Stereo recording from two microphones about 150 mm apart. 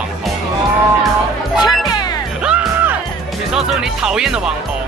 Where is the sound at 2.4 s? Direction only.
10° right (ahead or behind).